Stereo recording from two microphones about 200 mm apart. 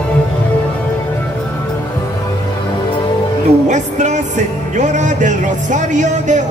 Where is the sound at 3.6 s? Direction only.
35° right (ahead or behind).